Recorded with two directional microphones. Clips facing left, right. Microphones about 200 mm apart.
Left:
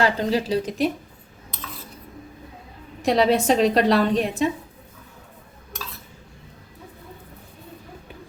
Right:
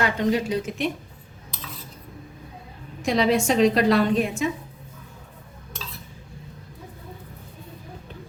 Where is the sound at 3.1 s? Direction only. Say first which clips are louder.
Left 2 dB; 35° left (ahead or behind).